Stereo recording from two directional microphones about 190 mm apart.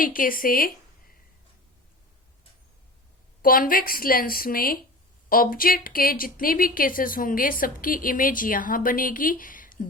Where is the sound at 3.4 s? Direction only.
50° left (ahead or behind).